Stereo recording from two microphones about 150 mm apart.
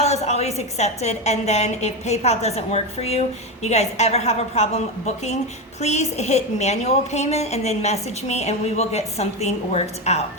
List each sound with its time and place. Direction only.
0.0 s a woman's voice: 45° left (ahead or behind)